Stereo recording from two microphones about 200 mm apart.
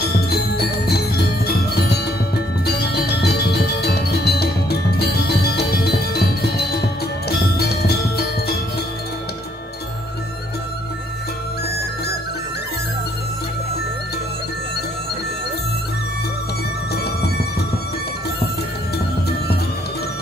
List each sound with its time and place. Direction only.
0.3 s music: 55° left (ahead or behind)
2.6 s music: 55° left (ahead or behind)
16.9 s music: 55° left (ahead or behind)